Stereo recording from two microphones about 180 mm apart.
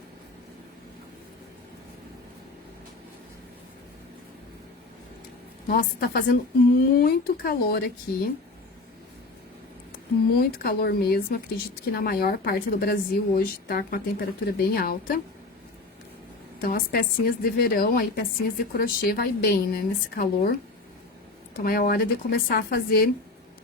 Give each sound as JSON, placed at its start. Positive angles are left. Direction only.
{"t": 5.6, "sound": "a woman's voice", "side_deg": 55}
{"t": 10.3, "sound": "speech", "side_deg": 55}
{"t": 16.6, "sound": "speech", "side_deg": 55}
{"t": 21.6, "sound": "speech", "side_deg": 55}